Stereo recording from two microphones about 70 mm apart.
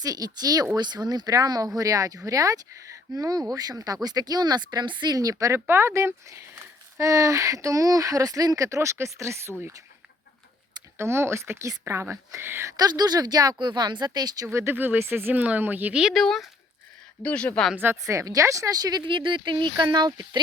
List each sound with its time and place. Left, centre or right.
0.0 s speech: right
0.8 s speech: right
5.5 s speech: right
10.9 s speech: right
12.7 s speech: right
14.4 s speech: right
16.1 s speech: centre
17.2 s speech: centre
18.0 s speech: right
19.5 s speech: right